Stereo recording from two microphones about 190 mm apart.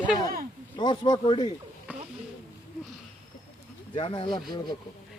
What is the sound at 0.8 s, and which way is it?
Speech, 25° left (ahead or behind).